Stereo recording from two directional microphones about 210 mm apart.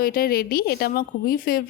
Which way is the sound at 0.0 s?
45° left (ahead or behind).